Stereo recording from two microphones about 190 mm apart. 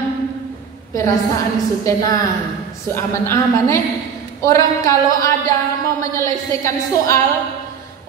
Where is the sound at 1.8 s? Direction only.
20° left (ahead or behind).